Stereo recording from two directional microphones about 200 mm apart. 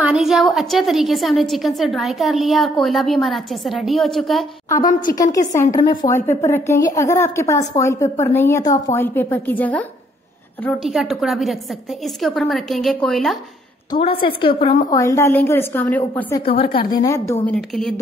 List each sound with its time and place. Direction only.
0.0 s a woman's voice: 5° right (ahead or behind)
4.6 s a woman's voice: 15° left (ahead or behind)
14.2 s a woman's voice: 25° left (ahead or behind)
14.9 s a woman's voice: 15° left (ahead or behind)
17.6 s a woman's voice: centre (ahead or behind)